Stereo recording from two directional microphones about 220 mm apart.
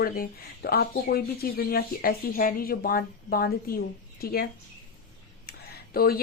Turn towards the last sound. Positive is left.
turn(degrees=45)  # may be behind; listen again after turning